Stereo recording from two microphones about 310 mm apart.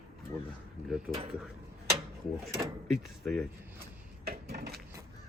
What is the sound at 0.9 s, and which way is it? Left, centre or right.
Speech, centre.